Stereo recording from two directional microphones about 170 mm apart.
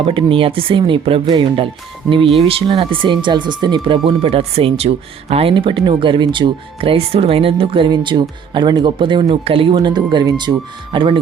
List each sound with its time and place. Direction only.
0.0 s speech: 30° right (ahead or behind)